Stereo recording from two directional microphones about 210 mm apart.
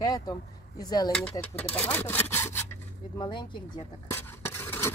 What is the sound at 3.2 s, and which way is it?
Speech, 20° left (ahead or behind).